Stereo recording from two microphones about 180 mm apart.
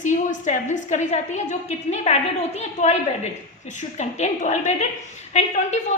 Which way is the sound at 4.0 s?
40° left (ahead or behind).